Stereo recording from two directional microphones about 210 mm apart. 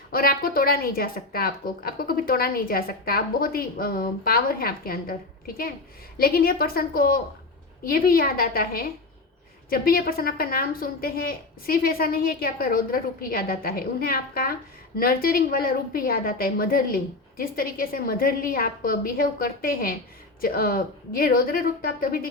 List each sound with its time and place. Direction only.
0.1 s speech: 45° left (ahead or behind)
6.1 s speech: 45° left (ahead or behind)